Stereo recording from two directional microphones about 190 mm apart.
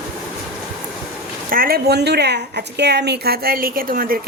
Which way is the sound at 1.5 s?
50° right (ahead or behind).